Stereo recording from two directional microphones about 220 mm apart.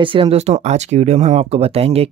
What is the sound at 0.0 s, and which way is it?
Speech, 25° right (ahead or behind).